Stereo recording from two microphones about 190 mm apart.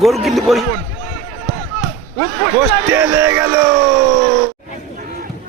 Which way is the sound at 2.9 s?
10° right (ahead or behind).